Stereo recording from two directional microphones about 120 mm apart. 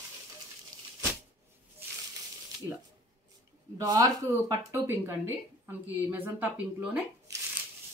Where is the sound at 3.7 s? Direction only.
30° right (ahead or behind); by 7.0 s 10° right (ahead or behind).